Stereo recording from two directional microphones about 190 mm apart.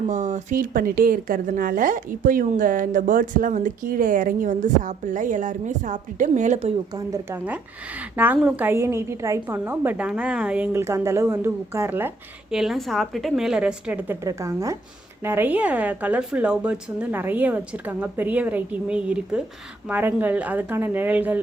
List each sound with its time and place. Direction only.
0.1 s speech: 40° right (ahead or behind)
6.9 s a woman's voice: 15° right (ahead or behind)